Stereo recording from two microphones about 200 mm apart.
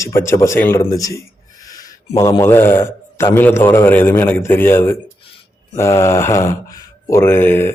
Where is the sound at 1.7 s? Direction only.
15° left (ahead or behind).